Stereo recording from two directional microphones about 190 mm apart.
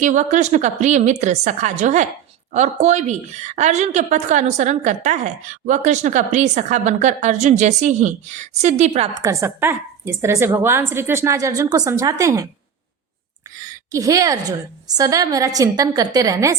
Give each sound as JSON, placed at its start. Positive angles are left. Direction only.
{"t": 0.0, "sound": "a woman's voice", "side_deg": -40}
{"t": 9.1, "sound": "a woman's voice", "side_deg": -15}
{"t": 13.6, "sound": "a woman's voice", "side_deg": -15}